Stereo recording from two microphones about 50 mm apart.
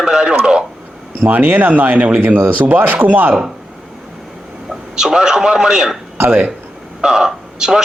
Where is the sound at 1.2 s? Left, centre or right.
Right.